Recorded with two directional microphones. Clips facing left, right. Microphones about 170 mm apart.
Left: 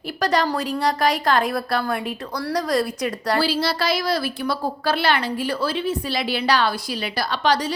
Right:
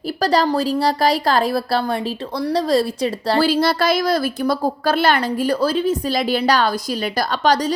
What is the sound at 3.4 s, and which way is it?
A woman's voice, 50° right (ahead or behind).